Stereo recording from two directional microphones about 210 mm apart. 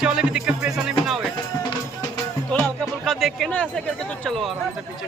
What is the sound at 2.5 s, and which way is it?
Speech, 5° left (ahead or behind).